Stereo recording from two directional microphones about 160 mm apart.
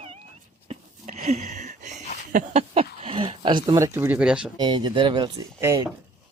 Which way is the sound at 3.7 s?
15° right (ahead or behind).